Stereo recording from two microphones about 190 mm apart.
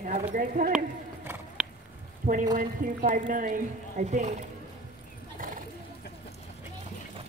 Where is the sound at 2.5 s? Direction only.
40° right (ahead or behind).